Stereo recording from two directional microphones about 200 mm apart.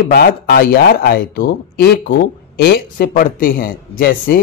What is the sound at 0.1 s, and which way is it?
Speech, 45° left (ahead or behind).